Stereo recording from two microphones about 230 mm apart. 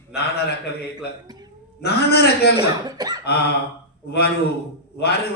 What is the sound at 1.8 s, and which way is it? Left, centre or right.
Speech, left.